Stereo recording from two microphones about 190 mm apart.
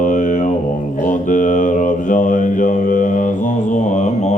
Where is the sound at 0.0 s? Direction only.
40° left (ahead or behind).